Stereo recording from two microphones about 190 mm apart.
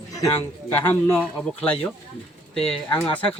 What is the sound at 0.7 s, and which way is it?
Speech, 10° left (ahead or behind).